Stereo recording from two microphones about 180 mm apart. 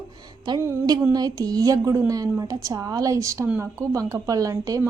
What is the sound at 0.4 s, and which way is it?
Speech, 20° right (ahead or behind).